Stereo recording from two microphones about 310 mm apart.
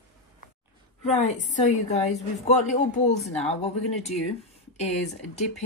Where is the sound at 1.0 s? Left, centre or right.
Left.